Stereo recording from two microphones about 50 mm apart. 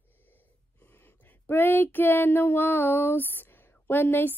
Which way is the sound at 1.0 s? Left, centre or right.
Left.